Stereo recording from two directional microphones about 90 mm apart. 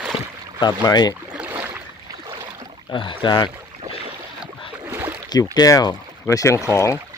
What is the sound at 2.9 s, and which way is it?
Speech, 65° left (ahead or behind).